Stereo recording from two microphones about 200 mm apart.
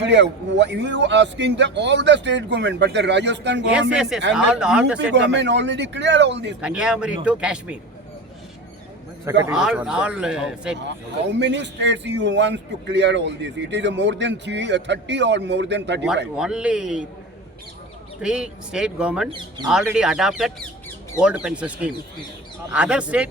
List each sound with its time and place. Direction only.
0.0 s a man's voice: 60° right (ahead or behind)
3.7 s speech: 5° right (ahead or behind)
5.3 s a man's voice: 60° right (ahead or behind)
6.6 s speech: 5° right (ahead or behind)
9.5 s speech: 5° right (ahead or behind)
11.3 s a man's voice: 60° right (ahead or behind)
16.3 s speech: 5° right (ahead or behind)
18.2 s speech: 5° right (ahead or behind)